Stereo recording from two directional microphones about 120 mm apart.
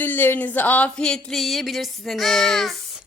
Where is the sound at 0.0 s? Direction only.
15° left (ahead or behind); by 3.0 s centre (ahead or behind).